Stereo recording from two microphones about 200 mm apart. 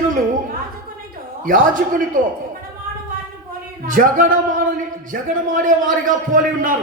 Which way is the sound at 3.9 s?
40° right (ahead or behind).